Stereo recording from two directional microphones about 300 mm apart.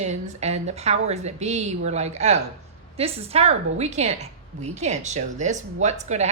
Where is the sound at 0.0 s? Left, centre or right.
Right.